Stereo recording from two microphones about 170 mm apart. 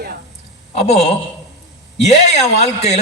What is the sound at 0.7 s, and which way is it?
A man's voice, 40° left (ahead or behind).